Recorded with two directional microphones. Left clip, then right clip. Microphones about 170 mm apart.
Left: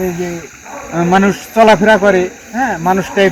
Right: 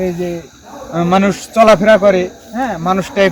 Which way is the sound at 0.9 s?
20° right (ahead or behind).